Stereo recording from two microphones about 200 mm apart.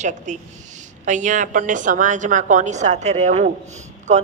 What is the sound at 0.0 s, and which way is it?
A woman's voice, 35° right (ahead or behind).